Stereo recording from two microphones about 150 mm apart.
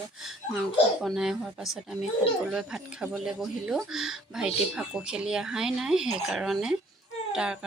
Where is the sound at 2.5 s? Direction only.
5° right (ahead or behind).